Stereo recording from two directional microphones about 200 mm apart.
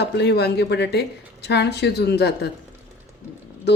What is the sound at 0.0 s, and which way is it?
Speech, 55° left (ahead or behind).